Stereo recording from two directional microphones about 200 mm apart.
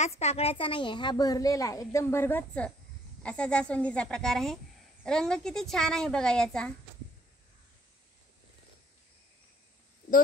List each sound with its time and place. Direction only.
0.0 s a woman's voice: 30° left (ahead or behind); by 6.7 s 5° left (ahead or behind)